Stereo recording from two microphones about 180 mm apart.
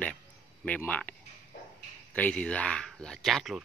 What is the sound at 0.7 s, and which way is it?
Speech, 10° left (ahead or behind).